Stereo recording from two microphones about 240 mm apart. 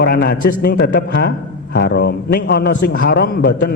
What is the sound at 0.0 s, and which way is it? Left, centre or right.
A man's voice, left.